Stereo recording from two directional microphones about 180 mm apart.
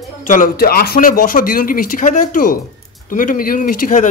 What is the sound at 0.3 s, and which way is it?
Speech, 55° left (ahead or behind).